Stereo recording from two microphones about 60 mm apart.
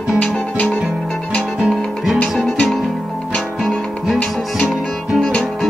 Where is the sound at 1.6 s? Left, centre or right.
Centre.